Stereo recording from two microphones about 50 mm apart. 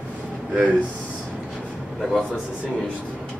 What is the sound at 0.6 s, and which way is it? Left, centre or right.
Speech, right.